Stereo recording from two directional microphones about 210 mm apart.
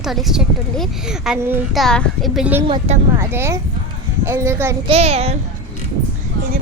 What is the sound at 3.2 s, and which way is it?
A child's voice, 10° right (ahead or behind).